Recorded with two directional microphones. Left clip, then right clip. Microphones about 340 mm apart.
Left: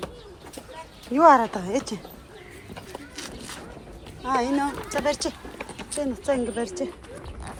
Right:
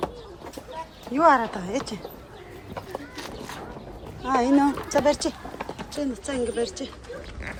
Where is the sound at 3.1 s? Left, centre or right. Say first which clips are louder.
Right 1 dB; centre.